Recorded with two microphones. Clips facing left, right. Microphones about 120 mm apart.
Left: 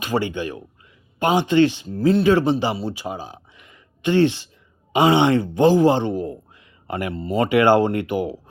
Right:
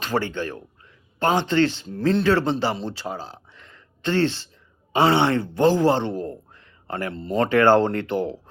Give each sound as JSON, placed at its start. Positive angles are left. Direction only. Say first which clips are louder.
{"t": 0.0, "sound": "speech", "louder": "left 2 dB", "side_deg": 15}